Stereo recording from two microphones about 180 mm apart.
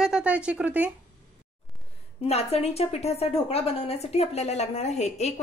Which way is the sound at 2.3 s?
35° left (ahead or behind).